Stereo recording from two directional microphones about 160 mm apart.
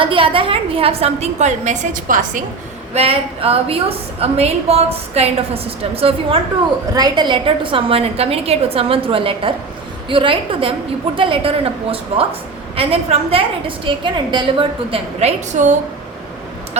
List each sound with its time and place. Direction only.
0.0 s a woman's voice: 35° right (ahead or behind); by 2.4 s 55° right (ahead or behind)
2.9 s a woman's voice: 40° right (ahead or behind)
6.9 s a woman's voice: 25° right (ahead or behind); by 15.7 s 45° right (ahead or behind)